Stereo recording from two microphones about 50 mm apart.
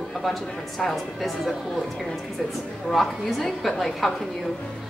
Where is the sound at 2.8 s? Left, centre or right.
Centre.